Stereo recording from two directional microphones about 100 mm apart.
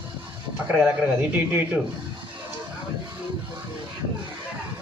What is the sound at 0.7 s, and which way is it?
Speech, 15° right (ahead or behind).